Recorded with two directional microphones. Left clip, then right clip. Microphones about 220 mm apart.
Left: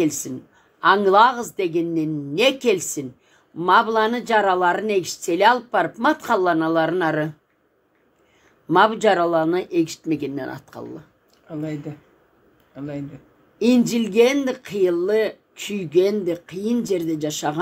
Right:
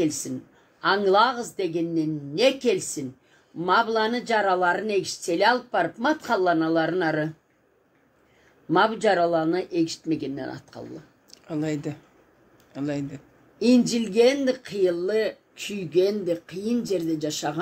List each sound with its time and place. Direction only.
0.7 s speech: 40° left (ahead or behind)
8.6 s speech: 40° left (ahead or behind)
11.2 s speech: 30° right (ahead or behind)
13.6 s speech: 40° left (ahead or behind)